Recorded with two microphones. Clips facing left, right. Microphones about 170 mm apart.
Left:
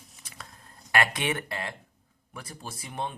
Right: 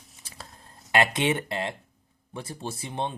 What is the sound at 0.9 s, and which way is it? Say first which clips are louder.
Speech: right 4 dB; 20° right (ahead or behind).